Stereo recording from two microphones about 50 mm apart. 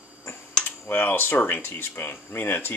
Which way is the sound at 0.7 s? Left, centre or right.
Left.